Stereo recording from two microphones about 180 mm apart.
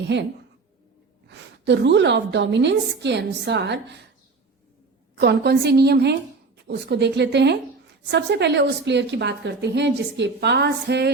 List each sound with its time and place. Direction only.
0.1 s a woman's voice: 80° right
1.3 s a woman's voice: 75° right (ahead or behind)
5.2 s a woman's voice: 65° right (ahead or behind)